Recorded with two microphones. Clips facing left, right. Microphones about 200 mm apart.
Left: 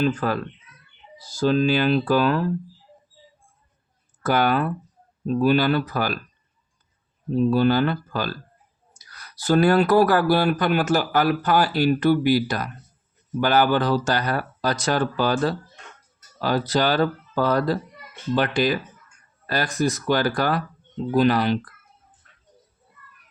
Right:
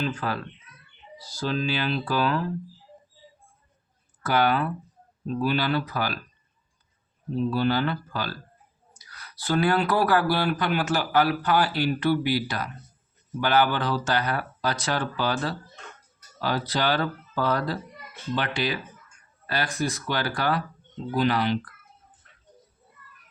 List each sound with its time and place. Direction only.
0.0 s speech: 50° left (ahead or behind)
4.2 s speech: 45° left (ahead or behind)
7.5 s speech: 50° left (ahead or behind)